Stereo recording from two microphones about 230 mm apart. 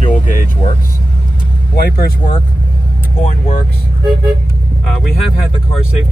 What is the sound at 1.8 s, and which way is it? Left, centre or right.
Speech, left.